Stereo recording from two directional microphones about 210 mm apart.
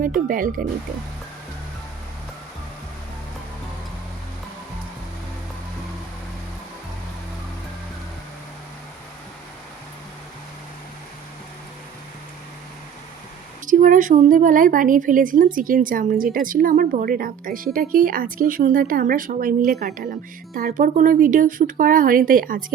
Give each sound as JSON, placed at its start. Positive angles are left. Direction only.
{"t": 0.0, "sound": "speech", "side_deg": -40}
{"t": 13.7, "sound": "speech", "side_deg": -40}